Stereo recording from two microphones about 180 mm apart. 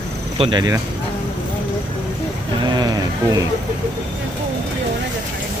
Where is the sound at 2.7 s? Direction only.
20° right (ahead or behind).